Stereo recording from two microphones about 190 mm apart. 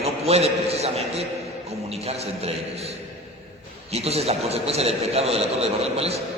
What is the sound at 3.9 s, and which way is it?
A man's voice, 30° right (ahead or behind).